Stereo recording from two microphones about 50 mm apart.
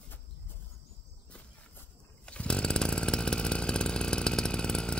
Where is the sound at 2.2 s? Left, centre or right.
Centre.